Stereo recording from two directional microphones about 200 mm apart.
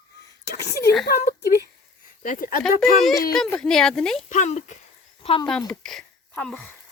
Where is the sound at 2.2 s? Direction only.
45° left (ahead or behind).